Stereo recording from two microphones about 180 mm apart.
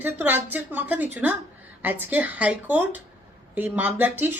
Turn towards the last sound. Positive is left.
turn(degrees=-10)  # may be behind; listen again after turning